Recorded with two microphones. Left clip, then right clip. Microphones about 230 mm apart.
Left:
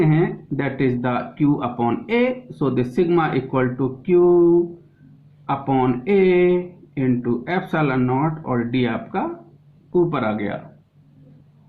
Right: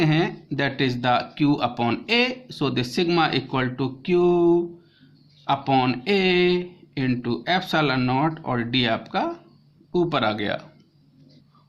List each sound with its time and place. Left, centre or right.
0.0 s speech: right
5.5 s speech: right